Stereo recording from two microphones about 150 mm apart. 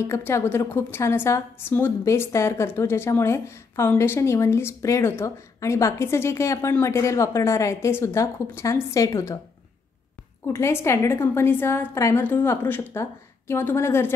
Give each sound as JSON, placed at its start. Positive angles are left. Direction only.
{"t": 0.0, "sound": "a woman's voice", "side_deg": 20}
{"t": 10.4, "sound": "a woman's voice", "side_deg": 15}